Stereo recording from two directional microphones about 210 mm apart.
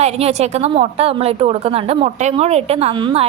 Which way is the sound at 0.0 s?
30° right (ahead or behind).